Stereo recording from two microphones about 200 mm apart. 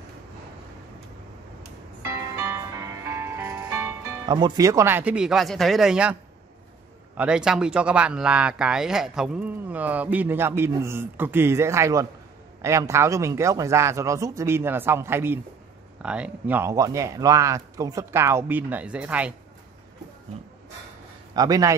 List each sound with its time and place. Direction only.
2.3 s music: 15° right (ahead or behind)
7.2 s speech: 5° right (ahead or behind)
21.3 s a man's voice: 20° right (ahead or behind)